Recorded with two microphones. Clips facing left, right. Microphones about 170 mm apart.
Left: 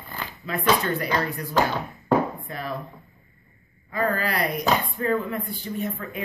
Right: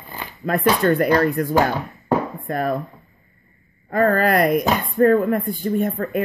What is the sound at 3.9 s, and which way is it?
Speech, 50° right (ahead or behind).